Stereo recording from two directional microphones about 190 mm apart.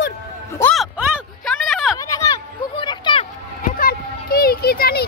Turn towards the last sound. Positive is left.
turn(degrees=55)  # may be behind; listen again after turning